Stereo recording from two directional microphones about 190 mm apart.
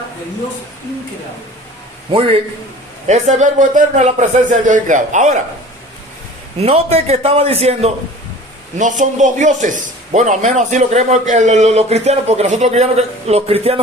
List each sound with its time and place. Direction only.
2.1 s a man's voice: 30° right (ahead or behind)
6.6 s a man's voice: 30° right (ahead or behind)